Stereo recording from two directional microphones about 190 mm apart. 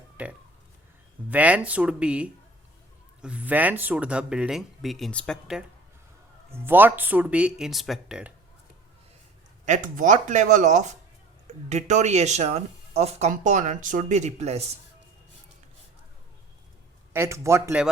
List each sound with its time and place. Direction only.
0.2 s speech: 5° right (ahead or behind)
6.5 s speech: 10° right (ahead or behind)
9.6 s speech: 40° right (ahead or behind)
17.1 s speech: 15° right (ahead or behind)